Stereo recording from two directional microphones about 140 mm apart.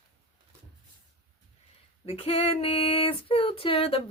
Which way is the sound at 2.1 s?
45° left (ahead or behind).